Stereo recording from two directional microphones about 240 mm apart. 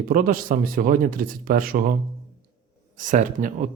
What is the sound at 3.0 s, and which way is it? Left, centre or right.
Speech, right.